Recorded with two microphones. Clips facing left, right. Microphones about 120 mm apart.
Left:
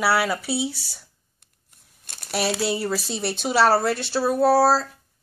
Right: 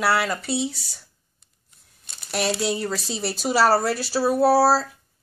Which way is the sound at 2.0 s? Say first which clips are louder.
Left 2 dB; 55° left (ahead or behind).